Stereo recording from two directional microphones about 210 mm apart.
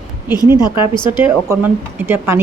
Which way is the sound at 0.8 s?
20° left (ahead or behind).